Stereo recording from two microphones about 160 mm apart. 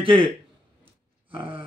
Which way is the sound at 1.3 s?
35° right (ahead or behind).